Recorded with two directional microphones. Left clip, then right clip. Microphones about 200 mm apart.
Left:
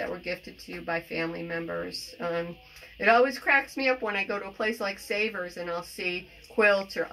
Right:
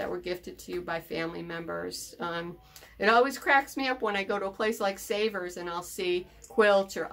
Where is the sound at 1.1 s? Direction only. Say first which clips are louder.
Left 2 dB; 30° right (ahead or behind).